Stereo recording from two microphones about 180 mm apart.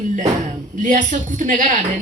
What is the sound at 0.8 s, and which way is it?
Speech, 45° right (ahead or behind).